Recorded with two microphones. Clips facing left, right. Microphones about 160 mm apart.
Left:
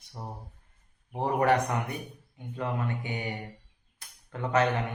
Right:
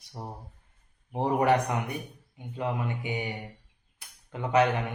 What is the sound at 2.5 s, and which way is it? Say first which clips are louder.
Speech: right 1 dB; 15° right (ahead or behind).